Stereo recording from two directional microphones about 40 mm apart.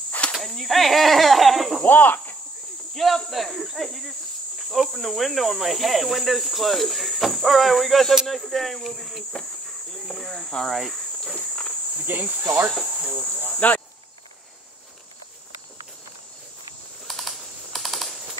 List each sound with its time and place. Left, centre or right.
0.3 s speech: centre
1.9 s speech: left
2.9 s speech: centre
4.6 s cricket: centre
4.8 s speech: centre
10.7 s speech: centre
12.0 s speech: right
13.6 s speech: left
17.1 s typing: centre